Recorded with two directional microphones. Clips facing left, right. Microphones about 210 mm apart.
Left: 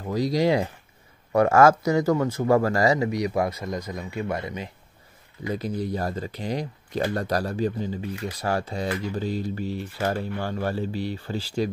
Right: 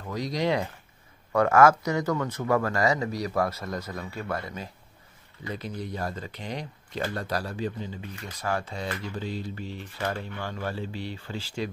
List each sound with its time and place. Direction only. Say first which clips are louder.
0.0 s speech: left 6 dB; 30° left (ahead or behind)
3.1 s speech: left 3 dB; 15° left (ahead or behind)
5.5 s speech: left 7 dB; 35° left (ahead or behind)